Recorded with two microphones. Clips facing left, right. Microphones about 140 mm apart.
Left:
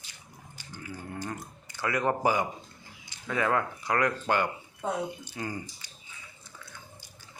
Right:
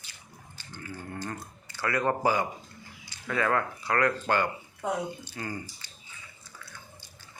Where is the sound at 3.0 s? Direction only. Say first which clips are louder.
Even; 15° left (ahead or behind).